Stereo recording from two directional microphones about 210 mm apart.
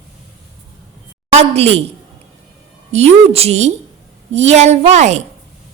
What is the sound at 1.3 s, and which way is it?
Speech, 30° right (ahead or behind).